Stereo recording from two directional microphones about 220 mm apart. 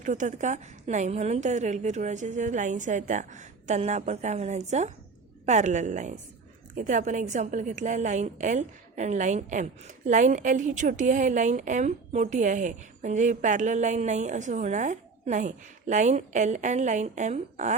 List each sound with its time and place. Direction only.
0.0 s a woman's voice: 35° right (ahead or behind)